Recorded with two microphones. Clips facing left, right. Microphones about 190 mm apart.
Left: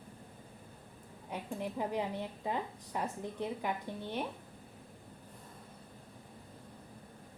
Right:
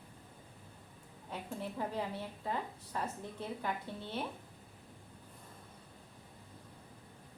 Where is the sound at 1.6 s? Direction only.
15° left (ahead or behind).